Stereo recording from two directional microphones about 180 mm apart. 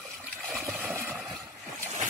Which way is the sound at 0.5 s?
Centre (ahead or behind).